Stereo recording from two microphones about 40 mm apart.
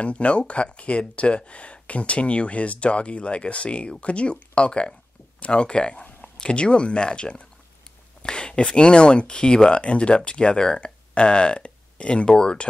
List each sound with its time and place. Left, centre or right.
0.0 s speech: left